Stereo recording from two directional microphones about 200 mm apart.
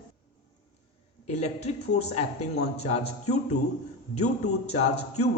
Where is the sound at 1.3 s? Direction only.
35° left (ahead or behind).